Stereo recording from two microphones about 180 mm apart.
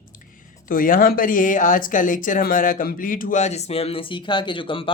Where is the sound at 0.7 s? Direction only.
50° left (ahead or behind); by 4.9 s 30° left (ahead or behind).